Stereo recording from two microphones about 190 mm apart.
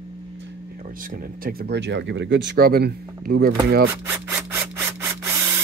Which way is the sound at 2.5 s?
50° right (ahead or behind).